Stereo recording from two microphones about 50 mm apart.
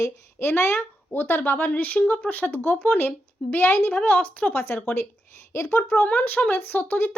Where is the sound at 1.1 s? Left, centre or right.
Left.